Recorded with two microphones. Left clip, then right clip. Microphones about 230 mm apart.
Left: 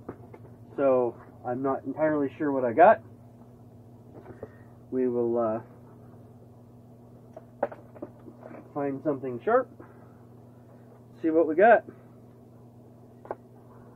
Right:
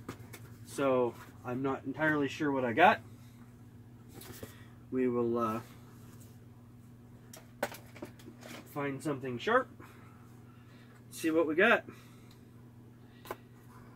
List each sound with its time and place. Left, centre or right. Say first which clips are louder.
0.7 s speech: left 6 dB; right
4.9 s speech: left 5 dB; right
8.7 s speech: left 7 dB; right
11.1 s speech: left 6 dB; right